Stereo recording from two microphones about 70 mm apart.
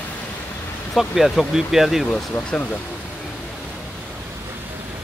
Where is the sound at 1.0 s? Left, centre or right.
Centre.